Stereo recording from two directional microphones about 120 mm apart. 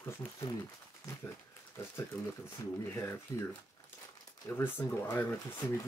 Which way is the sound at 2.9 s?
20° left (ahead or behind).